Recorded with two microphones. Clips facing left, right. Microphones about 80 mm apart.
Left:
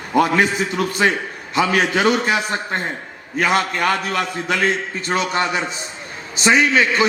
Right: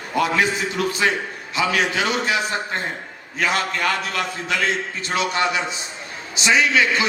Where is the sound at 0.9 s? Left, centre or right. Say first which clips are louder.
Left 2 dB; left.